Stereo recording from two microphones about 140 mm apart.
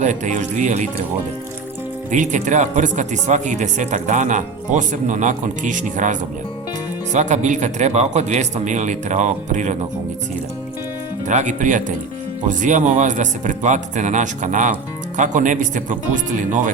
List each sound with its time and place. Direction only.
0.0 s speech: 60° right (ahead or behind)
2.0 s speech: 65° right (ahead or behind)
11.3 s speech: 60° right (ahead or behind)